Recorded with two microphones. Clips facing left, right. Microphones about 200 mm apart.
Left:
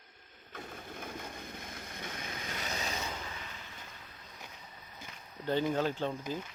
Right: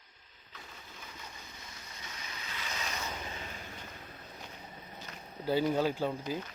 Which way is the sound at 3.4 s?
45° right (ahead or behind).